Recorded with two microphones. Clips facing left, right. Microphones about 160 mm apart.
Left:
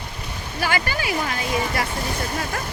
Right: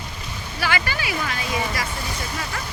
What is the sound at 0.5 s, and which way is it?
Speech, 45° left (ahead or behind).